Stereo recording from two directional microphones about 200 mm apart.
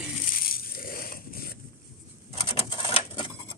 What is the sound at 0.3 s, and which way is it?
Crushing, 45° left (ahead or behind).